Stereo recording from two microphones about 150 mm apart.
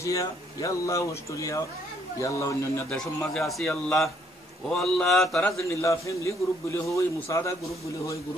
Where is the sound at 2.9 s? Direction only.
Centre (ahead or behind).